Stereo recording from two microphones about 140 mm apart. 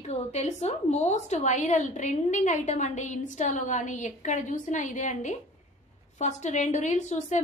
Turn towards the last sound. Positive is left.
turn(degrees=60)  # may be behind; listen again after turning